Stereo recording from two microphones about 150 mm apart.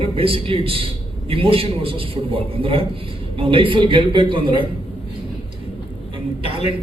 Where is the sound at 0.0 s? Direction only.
40° right (ahead or behind).